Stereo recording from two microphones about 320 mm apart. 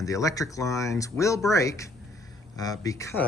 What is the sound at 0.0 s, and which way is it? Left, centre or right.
Speech, centre.